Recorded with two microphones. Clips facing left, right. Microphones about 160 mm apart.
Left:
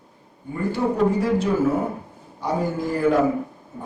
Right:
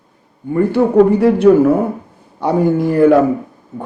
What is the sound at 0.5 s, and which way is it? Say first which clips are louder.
A man's voice: right 12 dB; 65° right (ahead or behind).